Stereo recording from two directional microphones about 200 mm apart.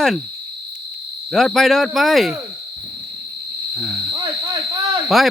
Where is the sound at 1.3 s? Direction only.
Centre (ahead or behind).